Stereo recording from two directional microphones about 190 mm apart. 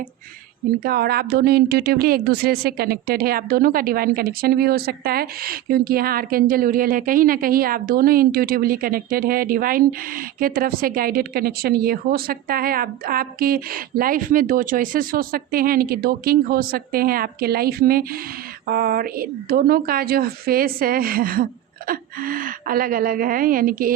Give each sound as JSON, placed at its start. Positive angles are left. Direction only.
{"t": 0.9, "sound": "speech", "side_deg": -55}